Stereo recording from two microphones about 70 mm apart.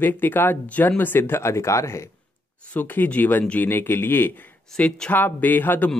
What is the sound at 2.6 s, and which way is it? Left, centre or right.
Speech, left.